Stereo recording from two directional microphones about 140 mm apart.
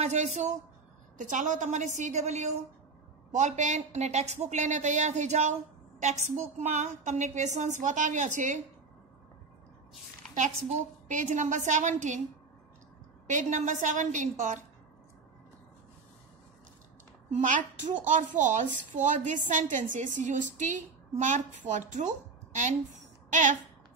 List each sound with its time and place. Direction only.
0.0 s speech: 55° right (ahead or behind)
10.3 s speech: 60° right (ahead or behind)
13.3 s speech: 60° right (ahead or behind)
17.3 s speech: 60° right (ahead or behind)